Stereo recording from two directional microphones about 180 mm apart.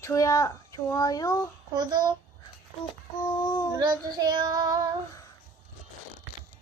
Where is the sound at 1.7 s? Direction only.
20° right (ahead or behind).